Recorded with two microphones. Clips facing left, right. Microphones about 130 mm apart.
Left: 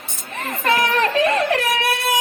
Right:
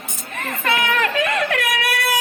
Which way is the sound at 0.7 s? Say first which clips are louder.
Left 2 dB; 35° left (ahead or behind).